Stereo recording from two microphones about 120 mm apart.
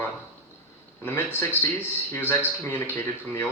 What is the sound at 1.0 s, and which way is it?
Speech, 20° left (ahead or behind).